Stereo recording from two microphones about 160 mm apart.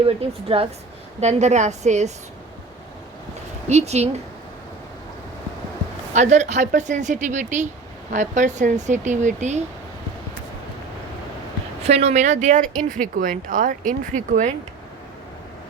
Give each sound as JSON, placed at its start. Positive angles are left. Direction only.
{"t": 0.0, "sound": "speech", "side_deg": -35}
{"t": 3.7, "sound": "speech", "side_deg": -45}
{"t": 6.1, "sound": "speech", "side_deg": -45}
{"t": 11.8, "sound": "speech", "side_deg": -40}